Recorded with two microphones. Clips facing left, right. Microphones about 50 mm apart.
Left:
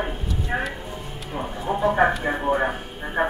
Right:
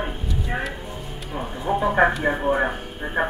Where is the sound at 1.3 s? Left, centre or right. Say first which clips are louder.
Right 2 dB; centre.